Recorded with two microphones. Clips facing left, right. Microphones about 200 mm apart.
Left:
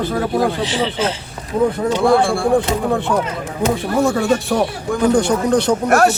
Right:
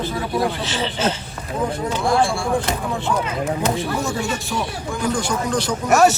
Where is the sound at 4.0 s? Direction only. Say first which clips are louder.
Left 8 dB; 55° left (ahead or behind).